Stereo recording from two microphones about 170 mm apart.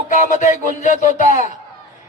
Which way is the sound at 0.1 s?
45° left (ahead or behind).